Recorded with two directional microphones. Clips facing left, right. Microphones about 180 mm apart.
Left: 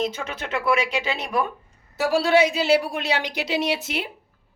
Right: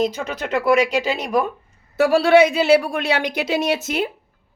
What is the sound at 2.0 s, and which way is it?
Speech, 60° right (ahead or behind).